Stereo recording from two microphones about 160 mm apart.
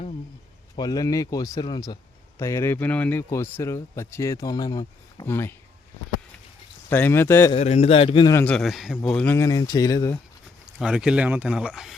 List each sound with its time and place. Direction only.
0.8 s speech: 25° left (ahead or behind)
6.9 s speech: 15° left (ahead or behind)
7.5 s a man's voice: 40° left (ahead or behind)
8.4 s speech: centre (ahead or behind)
9.0 s speech: 10° left (ahead or behind)
10.8 s speech: 5° right (ahead or behind)